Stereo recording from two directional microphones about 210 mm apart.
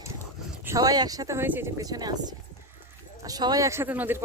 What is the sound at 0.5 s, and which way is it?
Speech, 10° right (ahead or behind).